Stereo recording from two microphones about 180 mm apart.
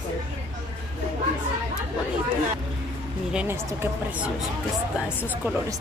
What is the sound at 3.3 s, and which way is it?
A woman's voice, 10° right (ahead or behind).